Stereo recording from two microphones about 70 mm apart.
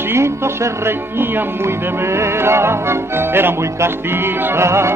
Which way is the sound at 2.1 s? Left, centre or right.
Right.